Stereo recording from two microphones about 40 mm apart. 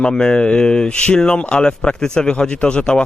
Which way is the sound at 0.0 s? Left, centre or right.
Left.